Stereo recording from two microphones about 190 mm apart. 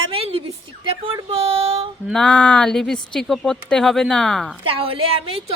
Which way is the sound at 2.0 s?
5° left (ahead or behind).